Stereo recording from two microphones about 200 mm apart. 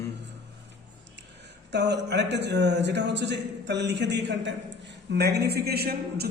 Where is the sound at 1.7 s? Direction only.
55° right (ahead or behind).